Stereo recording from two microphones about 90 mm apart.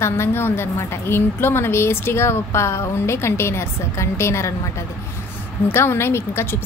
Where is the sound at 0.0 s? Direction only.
30° left (ahead or behind).